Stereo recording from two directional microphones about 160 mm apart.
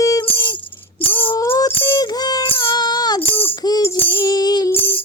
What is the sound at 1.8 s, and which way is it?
Music, 30° left (ahead or behind).